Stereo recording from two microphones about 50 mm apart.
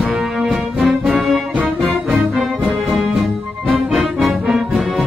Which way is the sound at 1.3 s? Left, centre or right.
Right.